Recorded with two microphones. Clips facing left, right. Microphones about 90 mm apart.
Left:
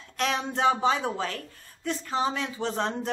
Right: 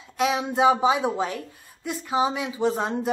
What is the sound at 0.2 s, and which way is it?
Speech, 10° right (ahead or behind).